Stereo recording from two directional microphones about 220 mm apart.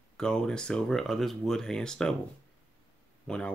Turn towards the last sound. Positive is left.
turn(degrees=5)  # may be behind; listen again after turning